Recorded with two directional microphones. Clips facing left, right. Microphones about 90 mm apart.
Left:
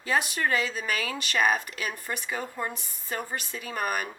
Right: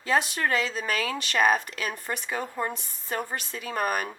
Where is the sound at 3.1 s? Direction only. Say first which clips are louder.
Right 2 dB; centre (ahead or behind).